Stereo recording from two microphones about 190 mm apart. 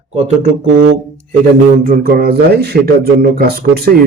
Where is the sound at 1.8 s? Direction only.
50° right (ahead or behind).